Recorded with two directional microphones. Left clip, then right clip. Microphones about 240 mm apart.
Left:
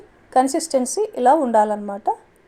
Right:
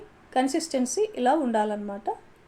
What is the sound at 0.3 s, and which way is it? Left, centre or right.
A woman's voice, left.